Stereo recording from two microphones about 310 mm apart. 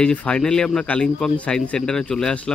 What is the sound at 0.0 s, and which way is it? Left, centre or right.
Speech, centre.